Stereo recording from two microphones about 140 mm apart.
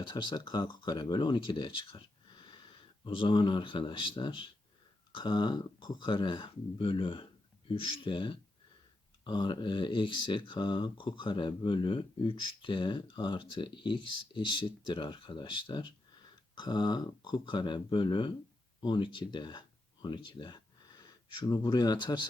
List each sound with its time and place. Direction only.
0.0 s speech: 35° left (ahead or behind)